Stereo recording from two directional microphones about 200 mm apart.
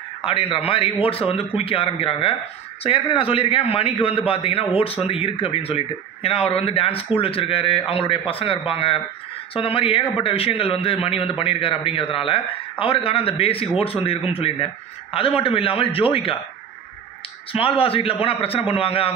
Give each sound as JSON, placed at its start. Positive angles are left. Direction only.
{"t": 0.2, "sound": "a man's voice", "side_deg": 25}
{"t": 17.5, "sound": "a man's voice", "side_deg": 25}